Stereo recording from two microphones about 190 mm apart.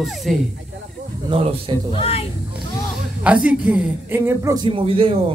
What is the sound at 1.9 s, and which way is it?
Speech, 30° left (ahead or behind).